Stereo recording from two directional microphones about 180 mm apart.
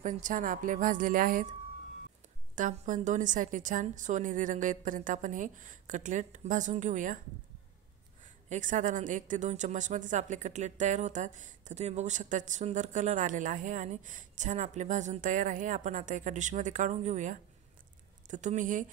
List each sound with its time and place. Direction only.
0.0 s a woman's voice: 45° right (ahead or behind)
2.5 s a woman's voice: 45° right (ahead or behind)
8.5 s a woman's voice: 45° right (ahead or behind)